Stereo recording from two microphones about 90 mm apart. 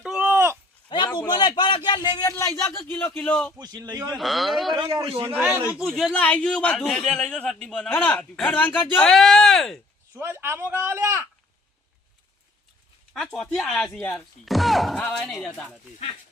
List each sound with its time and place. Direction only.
0.0 s a sound: 10° right (ahead or behind)
0.3 s a sound: 25° right (ahead or behind)
0.9 s a sound: 60° left (ahead or behind)
1.3 s a man's voice: 55° left (ahead or behind)
2.4 s speech: 25° left (ahead or behind)
3.6 s speech: 45° right (ahead or behind)
4.2 s speech: centre (ahead or behind)
4.7 s a man's voice: 55° right (ahead or behind)
5.7 s speech: centre (ahead or behind)
6.1 s a man's voice: 15° left (ahead or behind)
9.0 s speech: 5° left (ahead or behind)
10.2 s speech: 30° right (ahead or behind)
13.3 s a man's voice: 5° left (ahead or behind)